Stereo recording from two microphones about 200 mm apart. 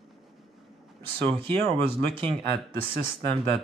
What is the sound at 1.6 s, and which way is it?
Speech, 25° right (ahead or behind).